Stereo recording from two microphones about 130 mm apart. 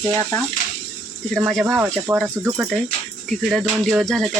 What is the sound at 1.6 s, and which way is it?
Speech, 15° right (ahead or behind).